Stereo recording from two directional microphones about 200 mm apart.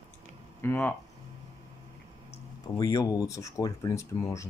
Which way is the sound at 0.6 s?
10° left (ahead or behind).